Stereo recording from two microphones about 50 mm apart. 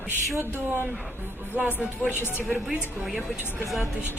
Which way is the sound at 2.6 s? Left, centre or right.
Centre.